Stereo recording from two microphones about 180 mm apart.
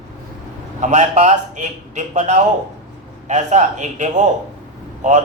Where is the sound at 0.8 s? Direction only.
40° right (ahead or behind).